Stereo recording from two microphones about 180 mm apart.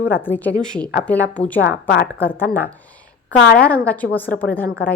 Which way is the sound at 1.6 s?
70° left (ahead or behind).